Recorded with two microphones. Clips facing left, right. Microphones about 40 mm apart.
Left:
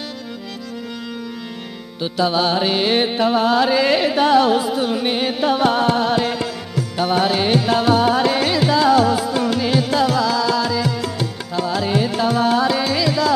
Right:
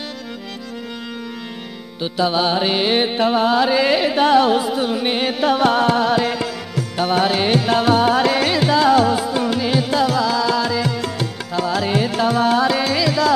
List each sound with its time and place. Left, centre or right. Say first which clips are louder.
2.0 s music: even; centre
3.5 s music: even; centre
4.1 s music: right 1 dB; right
5.4 s carnatic music: right 1 dB; right
7.0 s music: even; right
8.1 s music: right 1 dB; right
8.5 s music: even; right
9.0 s music: even; centre
10.2 s music: even; centre; by 11.2 s right
11.5 s music: right 1 dB; right
12.3 s music: right 1 dB; right